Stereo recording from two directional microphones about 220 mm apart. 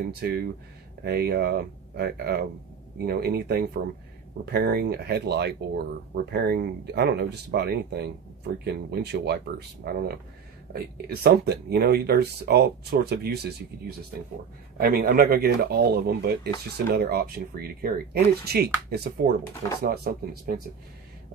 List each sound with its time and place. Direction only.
0.0 s speech: 45° right (ahead or behind)